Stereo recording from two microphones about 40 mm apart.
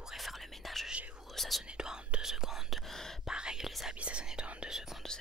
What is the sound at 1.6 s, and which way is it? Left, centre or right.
Whispering, centre.